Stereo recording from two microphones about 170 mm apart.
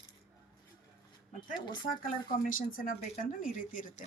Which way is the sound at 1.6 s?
25° left (ahead or behind).